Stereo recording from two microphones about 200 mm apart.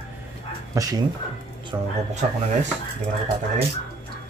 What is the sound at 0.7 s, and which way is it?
Speech, 20° right (ahead or behind).